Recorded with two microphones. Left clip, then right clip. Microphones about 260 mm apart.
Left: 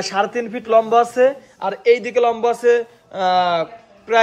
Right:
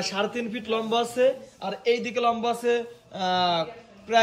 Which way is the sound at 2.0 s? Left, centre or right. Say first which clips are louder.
Left 8 dB; left.